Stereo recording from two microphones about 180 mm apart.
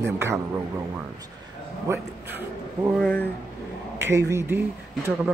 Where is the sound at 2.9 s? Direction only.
5° left (ahead or behind).